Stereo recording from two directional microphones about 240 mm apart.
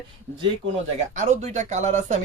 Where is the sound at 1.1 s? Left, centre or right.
Right.